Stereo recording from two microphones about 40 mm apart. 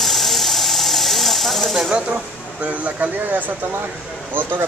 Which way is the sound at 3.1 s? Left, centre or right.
Right.